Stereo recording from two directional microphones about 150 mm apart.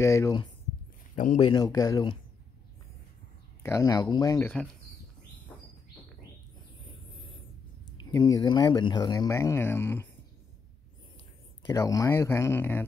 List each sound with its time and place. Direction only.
0.0 s speech: 20° left (ahead or behind)
1.1 s speech: 60° left (ahead or behind)
1.4 s speech: 25° left (ahead or behind)
3.6 s speech: 20° left (ahead or behind)
8.0 s speech: 25° left (ahead or behind)
11.6 s speech: 20° left (ahead or behind)